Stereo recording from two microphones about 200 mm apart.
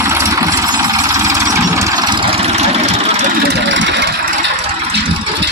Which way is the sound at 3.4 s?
55° right (ahead or behind).